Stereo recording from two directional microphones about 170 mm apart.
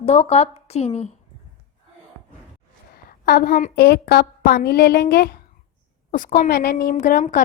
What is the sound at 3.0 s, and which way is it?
A woman's voice, 65° left (ahead or behind).